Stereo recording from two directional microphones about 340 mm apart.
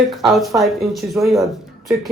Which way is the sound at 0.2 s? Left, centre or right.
Centre.